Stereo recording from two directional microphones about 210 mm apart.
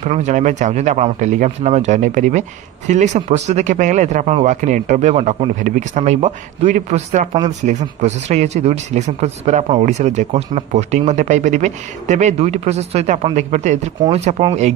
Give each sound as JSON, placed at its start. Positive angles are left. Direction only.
{"t": 0.0, "sound": "speech", "side_deg": -35}